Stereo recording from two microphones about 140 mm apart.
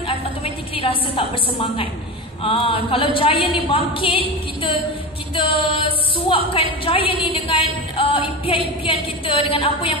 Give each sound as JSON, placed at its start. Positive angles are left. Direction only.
{"t": 0.7, "sound": "a woman's voice", "side_deg": 40}
{"t": 5.3, "sound": "a woman's voice", "side_deg": 40}